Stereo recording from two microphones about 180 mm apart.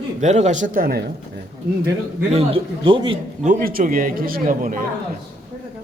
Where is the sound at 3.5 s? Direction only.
50° right (ahead or behind).